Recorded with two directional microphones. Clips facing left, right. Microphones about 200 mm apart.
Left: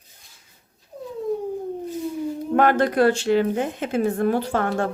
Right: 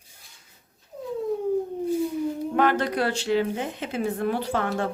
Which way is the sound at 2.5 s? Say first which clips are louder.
Left 6 dB; 50° left (ahead or behind).